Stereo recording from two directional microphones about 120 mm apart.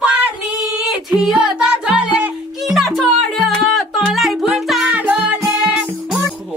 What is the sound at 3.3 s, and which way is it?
Music, 5° left (ahead or behind).